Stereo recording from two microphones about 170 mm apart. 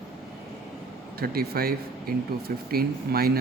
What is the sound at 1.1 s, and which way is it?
A man's voice, 65° right (ahead or behind).